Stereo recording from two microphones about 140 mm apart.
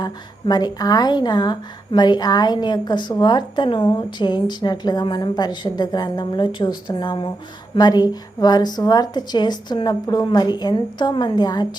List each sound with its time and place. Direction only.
0.0 s a woman's voice: 30° left (ahead or behind)